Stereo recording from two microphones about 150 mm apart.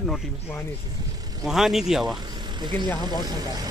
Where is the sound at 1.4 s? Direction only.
Centre (ahead or behind).